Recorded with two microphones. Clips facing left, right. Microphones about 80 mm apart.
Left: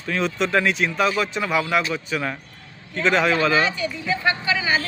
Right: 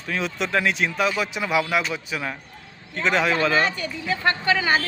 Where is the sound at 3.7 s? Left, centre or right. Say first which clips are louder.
Left 2 dB; right.